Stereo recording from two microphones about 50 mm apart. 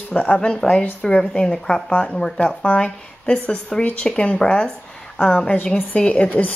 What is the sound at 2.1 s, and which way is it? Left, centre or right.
Speech, centre.